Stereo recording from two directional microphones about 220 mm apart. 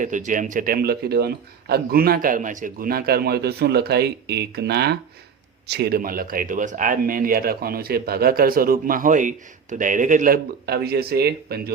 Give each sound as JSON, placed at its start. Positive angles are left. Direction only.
{"t": 0.0, "sound": "a man's voice", "side_deg": -35}